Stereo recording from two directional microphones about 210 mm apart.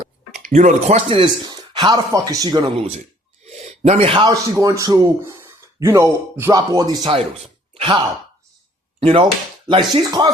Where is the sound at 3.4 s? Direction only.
30° right (ahead or behind).